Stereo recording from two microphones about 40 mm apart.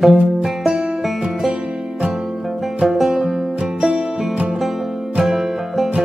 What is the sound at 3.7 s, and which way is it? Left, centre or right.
Music, right.